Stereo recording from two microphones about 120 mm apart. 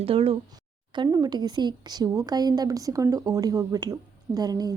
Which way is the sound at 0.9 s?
35° right (ahead or behind).